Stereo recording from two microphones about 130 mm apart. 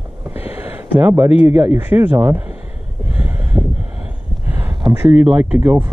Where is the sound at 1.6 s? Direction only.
15° right (ahead or behind).